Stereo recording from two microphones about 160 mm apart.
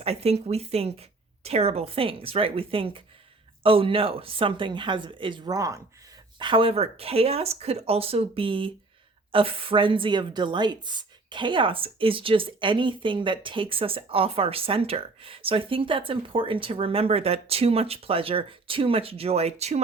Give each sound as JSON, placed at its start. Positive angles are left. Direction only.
{"t": 0.0, "sound": "a woman's voice", "side_deg": -40}
{"t": 6.4, "sound": "a woman's voice", "side_deg": -35}